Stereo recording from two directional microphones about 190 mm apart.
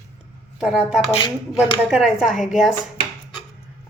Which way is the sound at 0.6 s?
5° right (ahead or behind).